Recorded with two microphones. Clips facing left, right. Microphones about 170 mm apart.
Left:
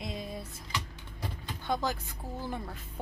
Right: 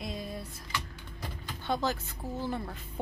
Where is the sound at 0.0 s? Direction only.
20° left (ahead or behind).